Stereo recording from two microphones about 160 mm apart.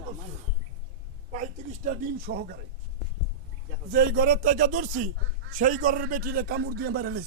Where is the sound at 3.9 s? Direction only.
60° right (ahead or behind); by 7.2 s 80° right.